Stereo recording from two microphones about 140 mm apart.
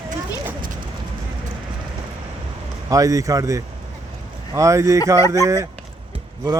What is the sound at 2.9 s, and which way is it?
A man's voice, 25° right (ahead or behind).